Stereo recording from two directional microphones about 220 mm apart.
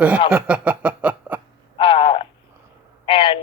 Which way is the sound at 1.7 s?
25° left (ahead or behind).